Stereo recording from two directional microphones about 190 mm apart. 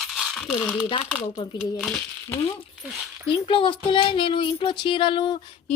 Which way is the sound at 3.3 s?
30° left (ahead or behind).